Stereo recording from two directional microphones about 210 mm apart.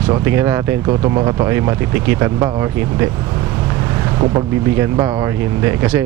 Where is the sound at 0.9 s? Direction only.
25° right (ahead or behind).